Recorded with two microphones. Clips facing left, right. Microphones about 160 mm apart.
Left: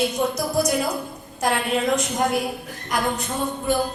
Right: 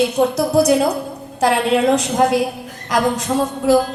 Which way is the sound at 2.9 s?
90° right.